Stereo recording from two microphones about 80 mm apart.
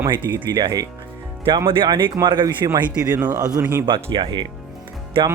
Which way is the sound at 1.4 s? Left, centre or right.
Right.